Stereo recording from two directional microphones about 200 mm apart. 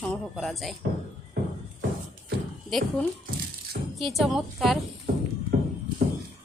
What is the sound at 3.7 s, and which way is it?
Music, 45° right (ahead or behind).